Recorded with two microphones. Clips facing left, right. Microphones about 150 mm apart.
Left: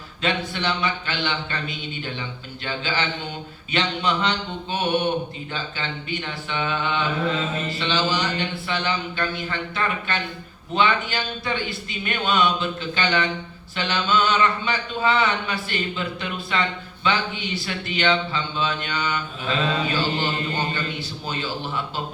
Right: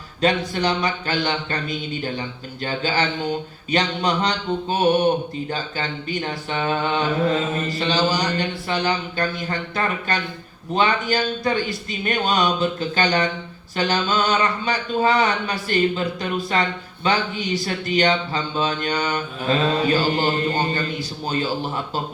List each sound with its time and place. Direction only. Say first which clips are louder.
0.2 s speech: right 5 dB; 40° right (ahead or behind)